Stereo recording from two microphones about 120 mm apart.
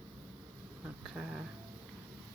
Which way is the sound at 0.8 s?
5° right (ahead or behind).